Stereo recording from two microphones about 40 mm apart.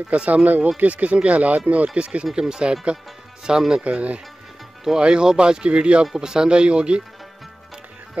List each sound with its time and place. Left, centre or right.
0.1 s speech: right; by 3.8 s centre
3.8 s speech: right
4.8 s speech: centre
6.1 s speech: centre